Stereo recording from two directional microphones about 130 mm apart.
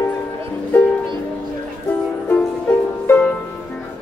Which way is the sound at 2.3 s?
15° left (ahead or behind).